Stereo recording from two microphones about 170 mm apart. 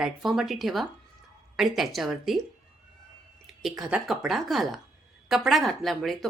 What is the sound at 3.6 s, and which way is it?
Speech, centre (ahead or behind).